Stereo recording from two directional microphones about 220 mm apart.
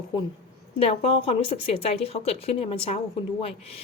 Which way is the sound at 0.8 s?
25° left (ahead or behind).